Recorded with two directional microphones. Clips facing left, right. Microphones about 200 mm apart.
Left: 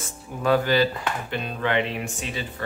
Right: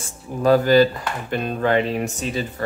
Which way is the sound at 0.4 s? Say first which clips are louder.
Right 6 dB; 40° right (ahead or behind).